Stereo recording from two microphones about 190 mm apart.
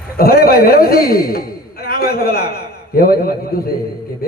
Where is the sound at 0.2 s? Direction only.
50° left (ahead or behind).